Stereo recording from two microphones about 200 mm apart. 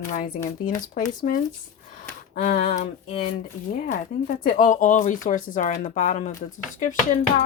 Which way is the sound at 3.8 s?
45° left (ahead or behind).